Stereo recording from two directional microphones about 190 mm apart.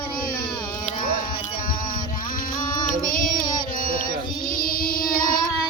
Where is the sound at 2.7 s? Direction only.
45° left (ahead or behind).